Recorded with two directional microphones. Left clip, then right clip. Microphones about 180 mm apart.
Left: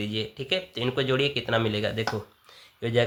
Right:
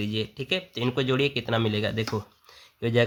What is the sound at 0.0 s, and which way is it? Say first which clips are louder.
Speech: even; 30° right (ahead or behind).